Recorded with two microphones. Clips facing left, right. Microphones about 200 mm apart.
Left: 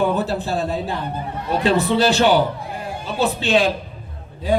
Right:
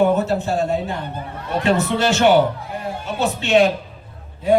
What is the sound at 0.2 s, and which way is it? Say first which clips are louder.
Speech: right 2 dB; 35° left (ahead or behind).